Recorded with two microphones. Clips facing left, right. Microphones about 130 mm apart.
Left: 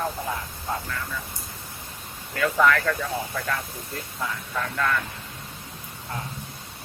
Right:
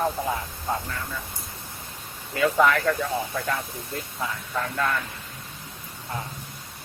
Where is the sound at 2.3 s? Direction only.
15° right (ahead or behind).